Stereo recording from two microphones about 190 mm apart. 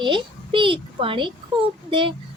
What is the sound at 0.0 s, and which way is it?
Speech, 25° right (ahead or behind).